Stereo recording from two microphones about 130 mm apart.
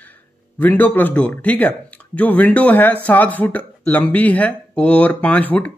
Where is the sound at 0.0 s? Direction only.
15° left (ahead or behind).